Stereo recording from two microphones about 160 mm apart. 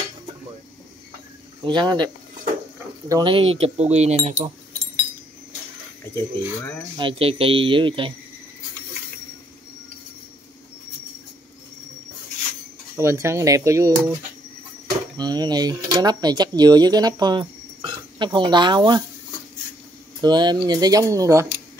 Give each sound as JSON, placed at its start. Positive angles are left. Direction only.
{"t": 1.6, "sound": "speech", "side_deg": -25}
{"t": 3.1, "sound": "speech", "side_deg": -25}
{"t": 3.3, "sound": "speech", "side_deg": -40}
{"t": 6.1, "sound": "speech", "side_deg": 15}
{"t": 7.0, "sound": "speech", "side_deg": -35}
{"t": 12.9, "sound": "speech", "side_deg": -15}
{"t": 15.1, "sound": "speech", "side_deg": -25}
{"t": 20.2, "sound": "speech", "side_deg": -25}